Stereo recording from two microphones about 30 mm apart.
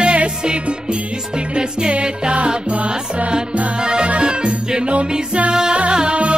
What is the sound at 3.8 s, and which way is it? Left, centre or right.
Music, right.